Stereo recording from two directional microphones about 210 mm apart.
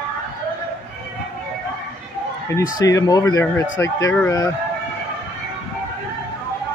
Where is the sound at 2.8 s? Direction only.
15° left (ahead or behind).